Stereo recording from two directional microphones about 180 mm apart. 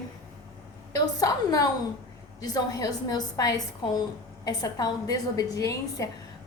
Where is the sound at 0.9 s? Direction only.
20° left (ahead or behind).